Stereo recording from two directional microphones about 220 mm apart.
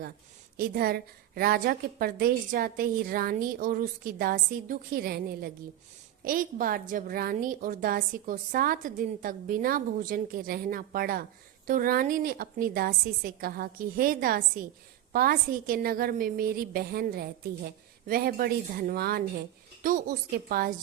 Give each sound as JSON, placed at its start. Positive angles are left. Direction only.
{"t": 0.5, "sound": "a woman's voice", "side_deg": -45}